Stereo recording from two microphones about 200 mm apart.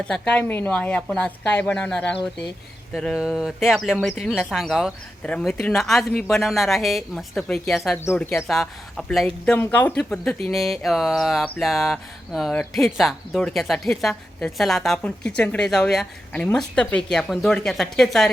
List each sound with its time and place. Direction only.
0.0 s a woman's voice: 5° left (ahead or behind)